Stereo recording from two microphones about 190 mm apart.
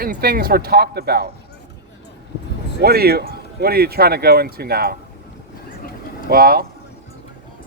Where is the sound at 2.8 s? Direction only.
55° right (ahead or behind).